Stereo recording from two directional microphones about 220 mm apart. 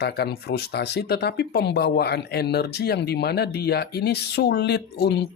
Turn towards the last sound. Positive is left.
turn(degrees=50)  # may be behind; listen again after turning